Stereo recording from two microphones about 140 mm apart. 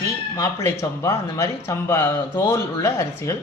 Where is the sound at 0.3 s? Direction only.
20° left (ahead or behind).